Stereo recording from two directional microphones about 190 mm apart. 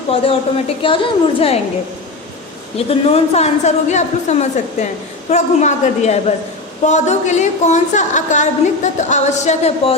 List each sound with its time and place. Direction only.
0.1 s a woman's voice: 30° left (ahead or behind)
2.7 s a woman's voice: 30° left (ahead or behind)